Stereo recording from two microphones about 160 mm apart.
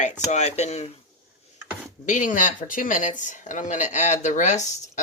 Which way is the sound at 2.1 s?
55° left (ahead or behind).